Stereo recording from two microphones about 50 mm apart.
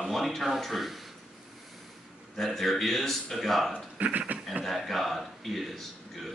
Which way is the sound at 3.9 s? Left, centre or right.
Right.